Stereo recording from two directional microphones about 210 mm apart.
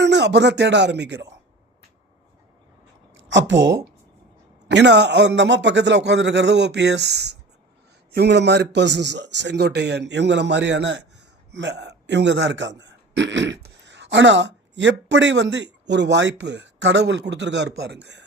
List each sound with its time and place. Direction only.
0.0 s speech: 55° right (ahead or behind)
3.2 s a man's voice: 60° right (ahead or behind)